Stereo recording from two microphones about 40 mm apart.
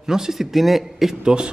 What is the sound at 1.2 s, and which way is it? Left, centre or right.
Speech, right.